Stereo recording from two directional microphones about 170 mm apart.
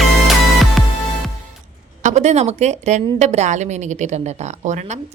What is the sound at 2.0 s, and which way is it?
A woman's voice, 40° right (ahead or behind).